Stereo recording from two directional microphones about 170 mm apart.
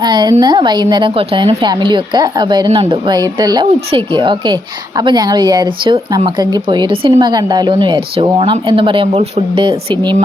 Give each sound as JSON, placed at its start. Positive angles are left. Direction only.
{"t": 0.0, "sound": "speech", "side_deg": -25}